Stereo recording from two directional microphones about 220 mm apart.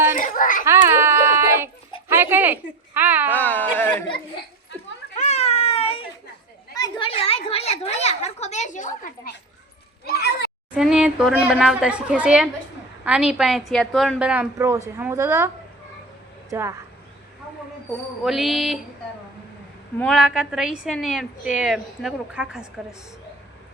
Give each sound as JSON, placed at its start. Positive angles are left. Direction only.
{"t": 0.2, "sound": "a sound", "side_deg": 35}
{"t": 0.6, "sound": "dog", "side_deg": -10}
{"t": 2.0, "sound": "a woman's voice", "side_deg": -10}
{"t": 3.3, "sound": "speech", "side_deg": 10}
{"t": 5.1, "sound": "baby cry", "side_deg": 30}
{"t": 6.7, "sound": "speech", "side_deg": 20}
{"t": 10.1, "sound": "a child's voice", "side_deg": 45}
{"t": 10.8, "sound": "a woman's voice", "side_deg": -5}
{"t": 16.5, "sound": "a woman's voice", "side_deg": -15}
{"t": 18.2, "sound": "a woman's voice", "side_deg": 0}
{"t": 20.0, "sound": "a woman's voice", "side_deg": 0}